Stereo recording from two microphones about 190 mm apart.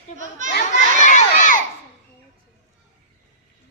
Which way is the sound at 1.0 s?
40° left (ahead or behind).